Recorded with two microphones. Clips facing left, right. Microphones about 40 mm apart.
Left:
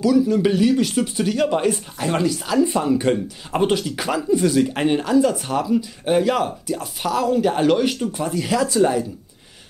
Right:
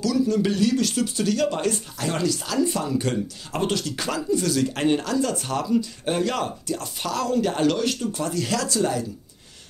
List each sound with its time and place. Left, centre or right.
0.0 s speech: centre